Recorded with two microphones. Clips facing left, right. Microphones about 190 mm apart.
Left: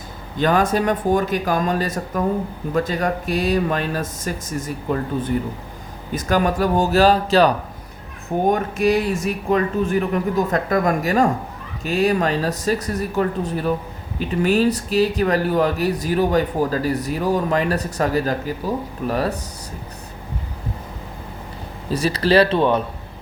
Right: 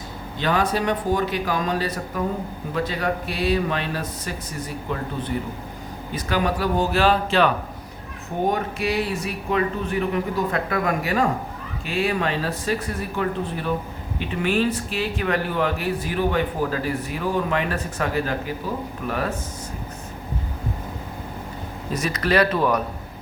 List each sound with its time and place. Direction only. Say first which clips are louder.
0.3 s speech: left 4 dB; 45° left (ahead or behind)
8.5 s speech: left 5 dB; 45° left (ahead or behind)
21.8 s speech: left 5 dB; 30° left (ahead or behind)